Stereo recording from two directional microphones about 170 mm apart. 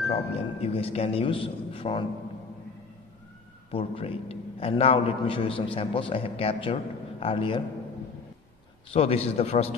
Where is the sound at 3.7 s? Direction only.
35° left (ahead or behind).